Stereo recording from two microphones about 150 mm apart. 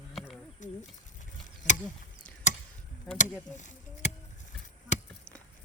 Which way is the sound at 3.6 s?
55° left (ahead or behind).